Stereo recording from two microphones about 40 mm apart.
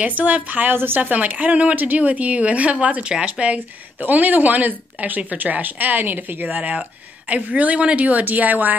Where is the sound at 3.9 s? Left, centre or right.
Right.